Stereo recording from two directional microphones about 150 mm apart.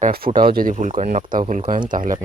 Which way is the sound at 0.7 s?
55° right (ahead or behind).